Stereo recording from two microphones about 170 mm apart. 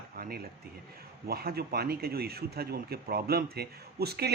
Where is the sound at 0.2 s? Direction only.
65° right (ahead or behind).